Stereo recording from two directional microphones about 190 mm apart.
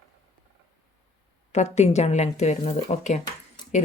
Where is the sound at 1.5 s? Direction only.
35° left (ahead or behind).